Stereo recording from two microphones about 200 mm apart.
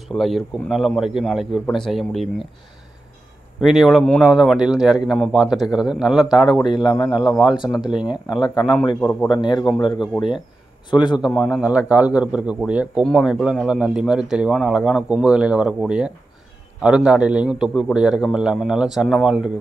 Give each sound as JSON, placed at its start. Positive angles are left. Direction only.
{"t": 0.1, "sound": "a man's voice", "side_deg": 0}
{"t": 3.6, "sound": "a man's voice", "side_deg": 0}
{"t": 6.8, "sound": "a man's voice", "side_deg": 20}
{"t": 7.8, "sound": "a man's voice", "side_deg": -5}
{"t": 8.3, "sound": "a man's voice", "side_deg": 20}
{"t": 11.3, "sound": "a man's voice", "side_deg": 0}